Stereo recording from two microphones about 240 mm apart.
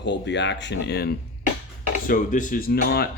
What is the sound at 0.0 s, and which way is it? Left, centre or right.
Speech, left.